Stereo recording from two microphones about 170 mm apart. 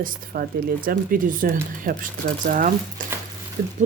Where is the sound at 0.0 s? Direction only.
55° right (ahead or behind).